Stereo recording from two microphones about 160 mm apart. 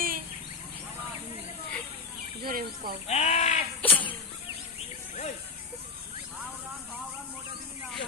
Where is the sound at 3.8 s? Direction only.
10° left (ahead or behind).